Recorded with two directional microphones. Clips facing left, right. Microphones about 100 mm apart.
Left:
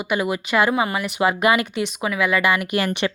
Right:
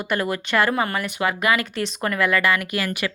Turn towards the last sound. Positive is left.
turn(degrees=20)  # may be behind; listen again after turning